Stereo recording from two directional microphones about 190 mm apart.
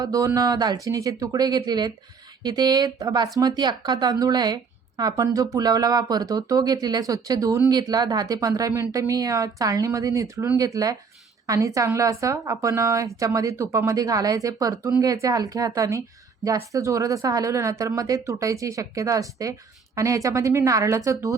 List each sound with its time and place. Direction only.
0.0 s speech: 20° right (ahead or behind)